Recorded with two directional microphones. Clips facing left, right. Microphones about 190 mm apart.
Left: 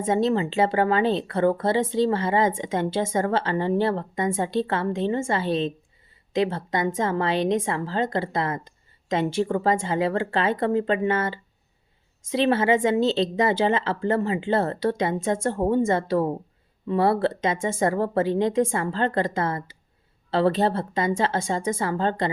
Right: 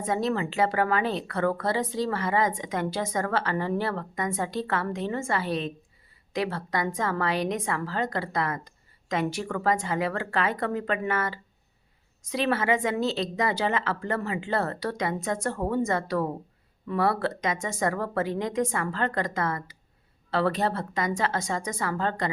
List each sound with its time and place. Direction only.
0.0 s speech: 25° left (ahead or behind)